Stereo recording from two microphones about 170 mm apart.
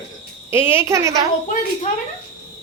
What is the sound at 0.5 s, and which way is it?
Speech, 15° right (ahead or behind).